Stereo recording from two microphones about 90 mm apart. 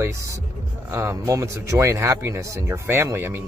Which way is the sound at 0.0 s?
35° right (ahead or behind).